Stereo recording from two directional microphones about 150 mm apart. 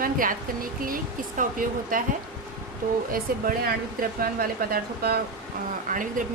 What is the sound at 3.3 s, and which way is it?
Speech, 75° right (ahead or behind).